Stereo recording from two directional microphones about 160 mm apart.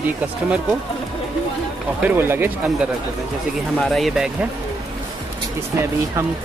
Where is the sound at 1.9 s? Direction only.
10° right (ahead or behind).